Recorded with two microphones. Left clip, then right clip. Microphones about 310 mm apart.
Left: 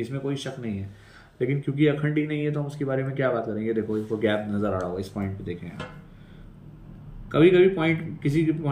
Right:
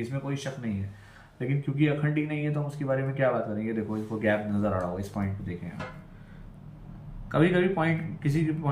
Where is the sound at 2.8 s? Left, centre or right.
Right.